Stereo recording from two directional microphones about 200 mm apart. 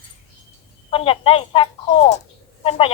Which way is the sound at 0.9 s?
25° left (ahead or behind).